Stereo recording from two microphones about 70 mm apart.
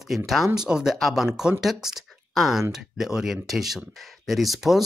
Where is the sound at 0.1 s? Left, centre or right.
Centre.